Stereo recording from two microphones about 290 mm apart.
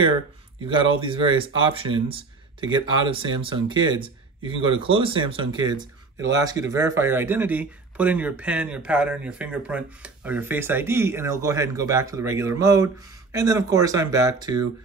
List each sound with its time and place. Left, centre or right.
0.7 s speech: centre